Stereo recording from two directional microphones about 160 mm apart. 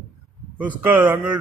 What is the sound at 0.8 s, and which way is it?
Speech, 10° right (ahead or behind).